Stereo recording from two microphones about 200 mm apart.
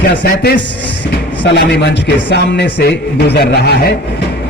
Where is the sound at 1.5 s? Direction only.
55° left (ahead or behind).